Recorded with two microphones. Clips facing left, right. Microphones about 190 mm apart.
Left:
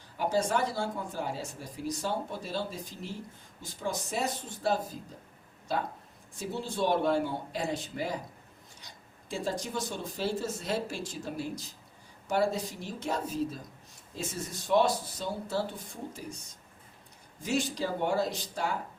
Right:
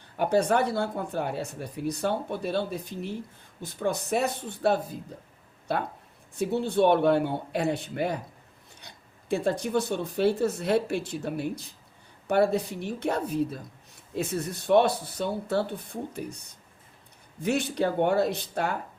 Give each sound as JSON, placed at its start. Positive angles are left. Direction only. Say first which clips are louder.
{"t": 0.2, "sound": "speech", "louder": "right 5 dB", "side_deg": -60}
{"t": 8.8, "sound": "a sound", "louder": "right 4 dB", "side_deg": -60}
{"t": 9.3, "sound": "speech", "louder": "right 8 dB", "side_deg": -60}